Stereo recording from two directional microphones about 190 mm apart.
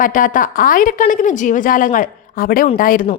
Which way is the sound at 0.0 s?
45° left (ahead or behind).